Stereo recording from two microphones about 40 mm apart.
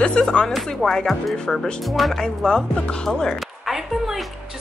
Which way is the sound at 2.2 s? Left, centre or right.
Centre.